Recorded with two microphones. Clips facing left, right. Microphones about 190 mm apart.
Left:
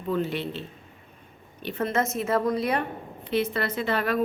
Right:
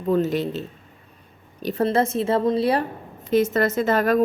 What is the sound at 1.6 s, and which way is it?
A woman's voice, 35° right (ahead or behind).